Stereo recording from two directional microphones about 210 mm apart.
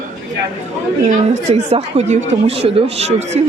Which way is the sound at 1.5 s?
30° right (ahead or behind).